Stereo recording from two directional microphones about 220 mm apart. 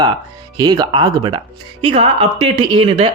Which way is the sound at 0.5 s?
20° right (ahead or behind).